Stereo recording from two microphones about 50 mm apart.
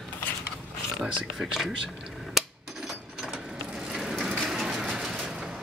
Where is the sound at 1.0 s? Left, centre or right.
Centre.